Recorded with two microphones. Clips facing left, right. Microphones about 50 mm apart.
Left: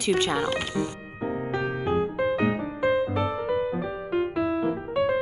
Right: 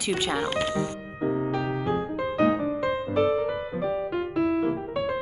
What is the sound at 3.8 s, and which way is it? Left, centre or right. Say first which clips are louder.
Music: even; centre.